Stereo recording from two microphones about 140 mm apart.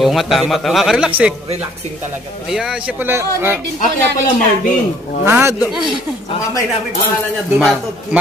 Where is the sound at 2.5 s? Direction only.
5° right (ahead or behind).